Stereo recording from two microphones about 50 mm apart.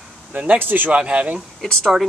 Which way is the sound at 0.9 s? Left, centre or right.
Right.